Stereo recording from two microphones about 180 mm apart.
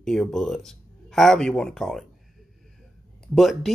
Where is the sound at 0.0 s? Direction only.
5° left (ahead or behind).